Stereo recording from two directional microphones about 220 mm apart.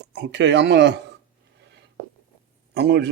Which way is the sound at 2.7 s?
50° right (ahead or behind).